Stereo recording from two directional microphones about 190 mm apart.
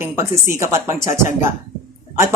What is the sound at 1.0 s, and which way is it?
Speech, 40° left (ahead or behind).